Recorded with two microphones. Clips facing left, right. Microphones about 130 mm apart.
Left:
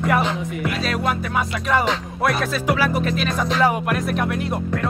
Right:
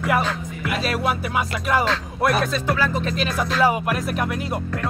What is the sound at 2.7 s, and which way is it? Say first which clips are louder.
Music: left 2 dB; 10° left (ahead or behind).